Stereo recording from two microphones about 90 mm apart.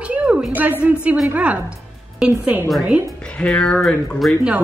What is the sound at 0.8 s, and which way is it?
A woman's voice, 15° right (ahead or behind).